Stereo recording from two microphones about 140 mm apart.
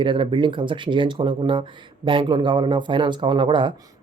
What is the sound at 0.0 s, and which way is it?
Speech, 35° right (ahead or behind).